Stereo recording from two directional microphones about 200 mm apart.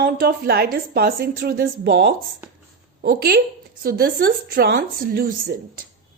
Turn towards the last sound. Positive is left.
turn(degrees=-50)  # may be behind; listen again after turning